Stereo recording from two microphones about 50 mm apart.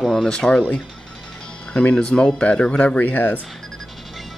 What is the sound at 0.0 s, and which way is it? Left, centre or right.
Speech, centre.